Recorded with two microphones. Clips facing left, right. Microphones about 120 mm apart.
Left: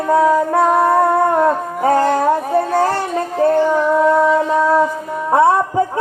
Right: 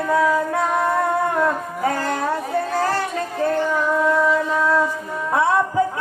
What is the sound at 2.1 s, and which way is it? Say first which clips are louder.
Music: left 7 dB; 35° left (ahead or behind).